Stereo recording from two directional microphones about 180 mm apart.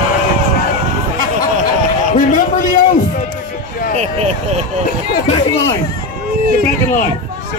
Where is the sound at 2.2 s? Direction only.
50° left (ahead or behind).